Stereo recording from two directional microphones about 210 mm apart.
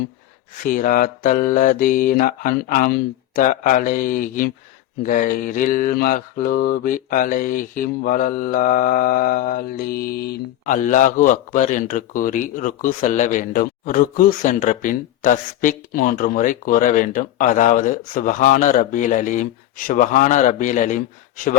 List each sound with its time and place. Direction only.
0.6 s mantra: 40° left (ahead or behind)